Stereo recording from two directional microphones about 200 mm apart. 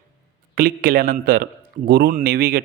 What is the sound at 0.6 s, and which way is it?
Speech, 45° right (ahead or behind).